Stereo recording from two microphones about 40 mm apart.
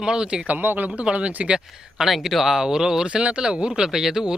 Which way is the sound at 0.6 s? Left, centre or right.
Right.